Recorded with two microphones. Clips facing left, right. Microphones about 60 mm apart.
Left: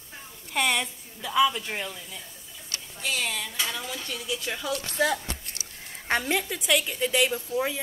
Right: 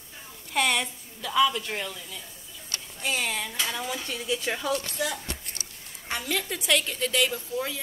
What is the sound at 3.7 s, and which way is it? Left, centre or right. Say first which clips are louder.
Speech: right 2 dB; centre.